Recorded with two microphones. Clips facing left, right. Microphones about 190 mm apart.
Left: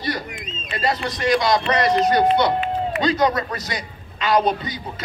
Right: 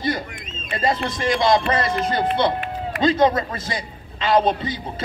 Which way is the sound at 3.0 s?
25° right (ahead or behind).